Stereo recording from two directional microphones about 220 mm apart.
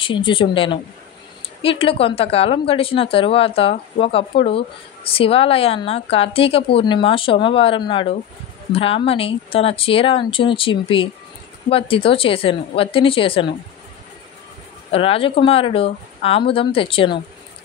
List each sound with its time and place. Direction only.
0.0 s a woman's voice: 20° left (ahead or behind)
14.9 s a woman's voice: 25° left (ahead or behind)